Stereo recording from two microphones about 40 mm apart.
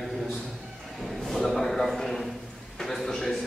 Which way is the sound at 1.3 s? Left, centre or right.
Centre.